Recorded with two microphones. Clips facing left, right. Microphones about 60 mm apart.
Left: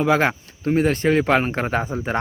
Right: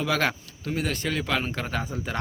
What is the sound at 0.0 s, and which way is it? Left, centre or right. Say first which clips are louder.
Speech: left 7 dB; left.